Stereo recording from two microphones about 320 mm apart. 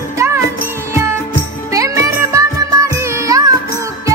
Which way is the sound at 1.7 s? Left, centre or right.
Centre.